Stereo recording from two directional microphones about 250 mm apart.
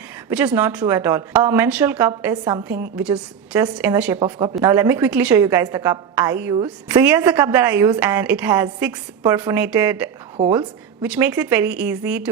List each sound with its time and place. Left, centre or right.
0.3 s a woman's voice: centre
2.9 s a woman's voice: centre
10.3 s a woman's voice: centre
11.0 s speech: centre